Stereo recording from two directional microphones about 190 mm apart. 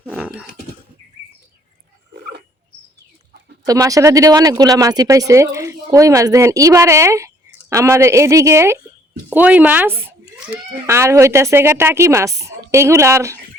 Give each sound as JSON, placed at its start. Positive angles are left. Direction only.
{"t": 0.1, "sound": "dog", "side_deg": -5}
{"t": 3.7, "sound": "speech", "side_deg": -15}